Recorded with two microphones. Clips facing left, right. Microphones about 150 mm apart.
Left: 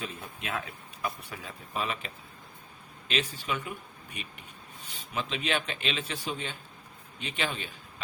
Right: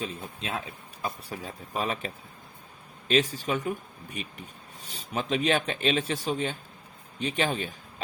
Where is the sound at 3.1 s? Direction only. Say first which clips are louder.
Right 7 dB; 40° right (ahead or behind).